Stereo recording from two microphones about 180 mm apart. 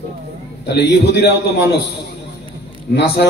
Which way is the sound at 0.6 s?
70° left (ahead or behind).